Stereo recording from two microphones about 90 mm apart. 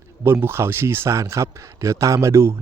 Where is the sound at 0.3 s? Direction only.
25° right (ahead or behind).